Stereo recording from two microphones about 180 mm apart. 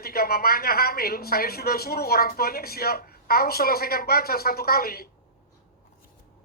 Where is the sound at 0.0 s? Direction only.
55° left (ahead or behind).